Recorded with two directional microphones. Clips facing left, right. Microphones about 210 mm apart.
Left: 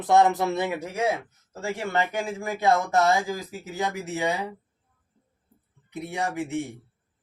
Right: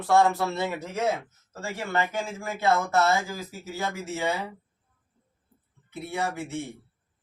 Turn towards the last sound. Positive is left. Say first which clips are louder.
# left 2 dB
turn(degrees=15)  # may be behind; listen again after turning